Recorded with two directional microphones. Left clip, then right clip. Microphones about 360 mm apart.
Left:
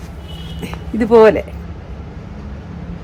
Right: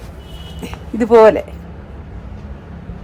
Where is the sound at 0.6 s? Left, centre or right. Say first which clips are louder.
Even; centre.